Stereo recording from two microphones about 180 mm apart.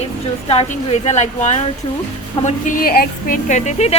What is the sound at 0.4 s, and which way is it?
A woman's voice, 35° left (ahead or behind).